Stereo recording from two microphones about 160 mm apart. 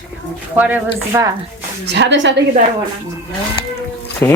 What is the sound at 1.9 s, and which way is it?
Speech, 90° right.